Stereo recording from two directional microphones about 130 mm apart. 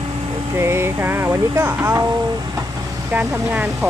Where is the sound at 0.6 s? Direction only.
20° right (ahead or behind).